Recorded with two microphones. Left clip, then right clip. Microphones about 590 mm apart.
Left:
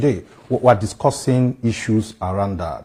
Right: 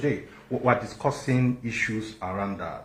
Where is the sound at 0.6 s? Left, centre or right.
Left.